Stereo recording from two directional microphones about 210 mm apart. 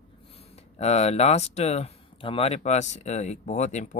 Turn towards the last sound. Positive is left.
turn(degrees=35)  # may be behind; listen again after turning